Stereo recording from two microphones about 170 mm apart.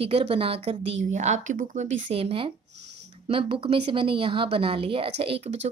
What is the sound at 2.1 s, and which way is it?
A woman's voice, 35° right (ahead or behind).